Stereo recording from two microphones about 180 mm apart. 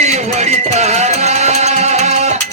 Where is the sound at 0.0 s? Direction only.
40° right (ahead or behind).